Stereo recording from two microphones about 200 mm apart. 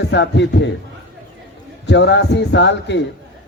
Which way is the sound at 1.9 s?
60° left (ahead or behind).